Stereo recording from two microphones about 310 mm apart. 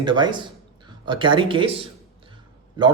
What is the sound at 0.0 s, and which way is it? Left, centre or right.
A man's voice, centre.